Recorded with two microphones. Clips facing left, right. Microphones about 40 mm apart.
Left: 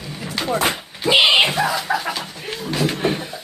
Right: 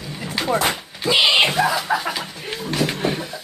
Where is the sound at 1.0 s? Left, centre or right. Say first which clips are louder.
Left 2 dB; left.